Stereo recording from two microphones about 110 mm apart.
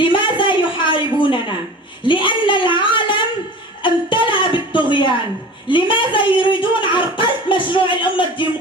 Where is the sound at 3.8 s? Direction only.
50° left (ahead or behind).